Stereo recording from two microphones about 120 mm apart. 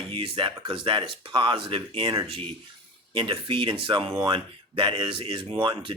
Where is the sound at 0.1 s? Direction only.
45° right (ahead or behind).